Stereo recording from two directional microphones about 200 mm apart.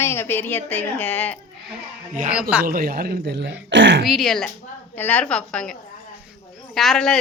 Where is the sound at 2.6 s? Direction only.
45° right (ahead or behind); by 4.0 s 65° right (ahead or behind).